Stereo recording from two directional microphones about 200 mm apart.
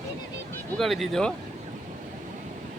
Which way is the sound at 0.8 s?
Centre (ahead or behind).